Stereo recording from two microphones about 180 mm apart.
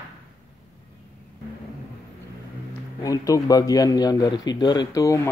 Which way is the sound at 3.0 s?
20° left (ahead or behind).